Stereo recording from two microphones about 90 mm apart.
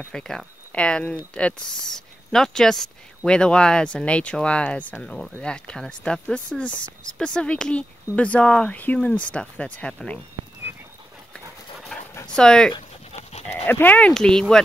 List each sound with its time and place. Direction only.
0.1 s speech: 5° left (ahead or behind)
11.9 s dog: 10° left (ahead or behind)
12.3 s speech: 10° left (ahead or behind)
13.7 s speech: 20° left (ahead or behind)